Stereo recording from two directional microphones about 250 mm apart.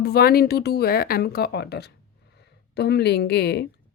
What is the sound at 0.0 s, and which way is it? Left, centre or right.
Speech, left.